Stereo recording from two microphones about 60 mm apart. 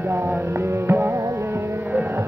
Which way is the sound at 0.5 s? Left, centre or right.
Right.